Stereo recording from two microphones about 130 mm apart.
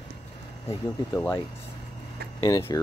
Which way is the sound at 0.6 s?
20° left (ahead or behind).